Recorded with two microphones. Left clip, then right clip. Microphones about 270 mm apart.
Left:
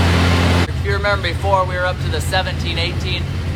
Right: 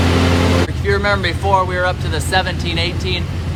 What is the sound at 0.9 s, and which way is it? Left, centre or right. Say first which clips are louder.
Vehicle: right 3 dB; right.